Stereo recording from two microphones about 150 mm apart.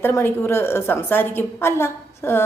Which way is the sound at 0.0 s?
15° left (ahead or behind).